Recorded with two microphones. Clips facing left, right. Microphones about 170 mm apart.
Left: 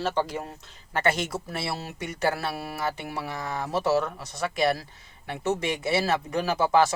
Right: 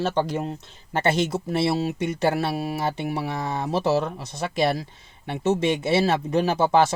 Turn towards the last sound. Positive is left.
turn(degrees=-25)  # may be behind; listen again after turning